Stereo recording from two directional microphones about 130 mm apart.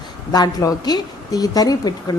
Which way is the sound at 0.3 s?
30° left (ahead or behind).